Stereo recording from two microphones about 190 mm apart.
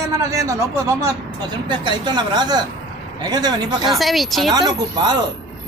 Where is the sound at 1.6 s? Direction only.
25° right (ahead or behind).